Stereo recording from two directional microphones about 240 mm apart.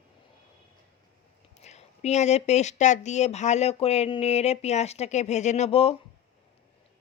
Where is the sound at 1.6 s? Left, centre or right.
Left.